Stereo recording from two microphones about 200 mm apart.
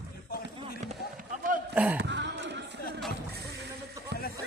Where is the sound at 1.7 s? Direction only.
5° right (ahead or behind).